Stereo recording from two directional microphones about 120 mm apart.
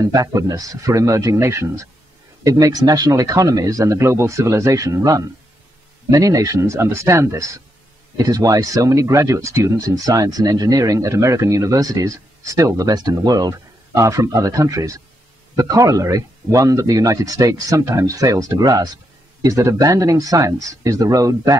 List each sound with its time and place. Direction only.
0.0 s speech: 30° right (ahead or behind)